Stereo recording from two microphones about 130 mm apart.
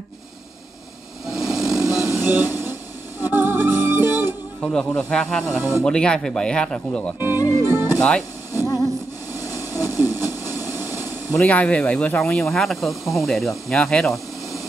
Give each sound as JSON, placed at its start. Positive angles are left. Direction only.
{"t": 1.2, "sound": "a sound", "side_deg": -5}
{"t": 1.8, "sound": "music", "side_deg": -20}
{"t": 4.6, "sound": "speech", "side_deg": 5}
{"t": 5.4, "sound": "speech", "side_deg": -20}
{"t": 5.9, "sound": "speech", "side_deg": 5}
{"t": 7.2, "sound": "music", "side_deg": -15}
{"t": 8.0, "sound": "speech", "side_deg": 5}
{"t": 9.3, "sound": "a sound", "side_deg": -20}
{"t": 11.3, "sound": "speech", "side_deg": 10}